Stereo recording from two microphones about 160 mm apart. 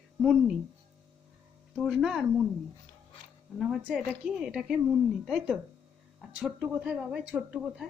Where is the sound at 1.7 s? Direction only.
Centre (ahead or behind).